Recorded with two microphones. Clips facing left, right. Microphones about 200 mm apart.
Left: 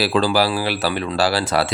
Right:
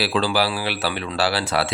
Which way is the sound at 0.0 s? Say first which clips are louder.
Left 3 dB; 45° left (ahead or behind).